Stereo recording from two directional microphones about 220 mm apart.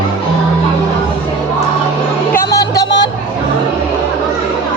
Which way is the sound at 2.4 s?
15° left (ahead or behind).